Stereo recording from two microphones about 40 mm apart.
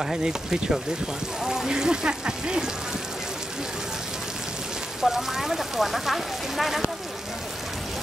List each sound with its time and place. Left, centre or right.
0.0 s speech: centre
5.0 s speech: centre